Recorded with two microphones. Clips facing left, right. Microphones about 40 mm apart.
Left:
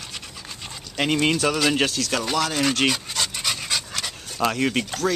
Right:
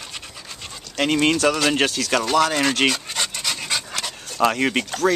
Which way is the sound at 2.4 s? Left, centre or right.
Centre.